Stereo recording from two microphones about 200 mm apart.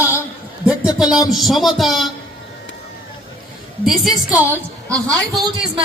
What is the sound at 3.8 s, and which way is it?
A woman's voice, centre (ahead or behind).